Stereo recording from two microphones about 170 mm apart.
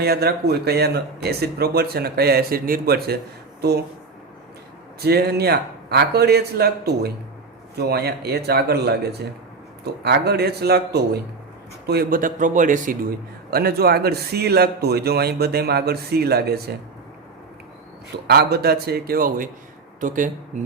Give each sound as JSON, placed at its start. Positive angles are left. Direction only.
{"t": 0.0, "sound": "speech", "side_deg": -70}
{"t": 4.9, "sound": "a man's voice", "side_deg": -70}
{"t": 13.5, "sound": "speech", "side_deg": -65}
{"t": 18.3, "sound": "a man's voice", "side_deg": -70}